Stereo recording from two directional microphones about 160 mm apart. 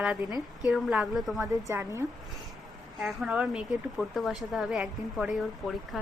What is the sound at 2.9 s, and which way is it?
Speech, centre (ahead or behind).